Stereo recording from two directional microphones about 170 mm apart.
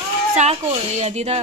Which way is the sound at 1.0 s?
40° right (ahead or behind).